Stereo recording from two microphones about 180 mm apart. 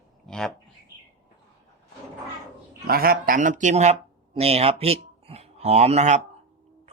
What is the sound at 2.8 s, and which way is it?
Speech, 55° right (ahead or behind).